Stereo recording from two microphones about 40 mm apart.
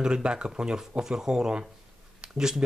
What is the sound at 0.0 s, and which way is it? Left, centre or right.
Speech, right.